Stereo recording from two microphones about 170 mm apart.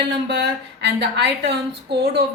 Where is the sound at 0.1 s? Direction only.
75° right (ahead or behind).